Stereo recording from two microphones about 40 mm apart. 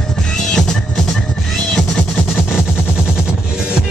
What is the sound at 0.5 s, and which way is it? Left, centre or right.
Music, centre.